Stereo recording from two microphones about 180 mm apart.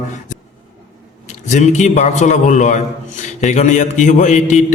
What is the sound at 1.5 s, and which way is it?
A man's voice, 40° left (ahead or behind).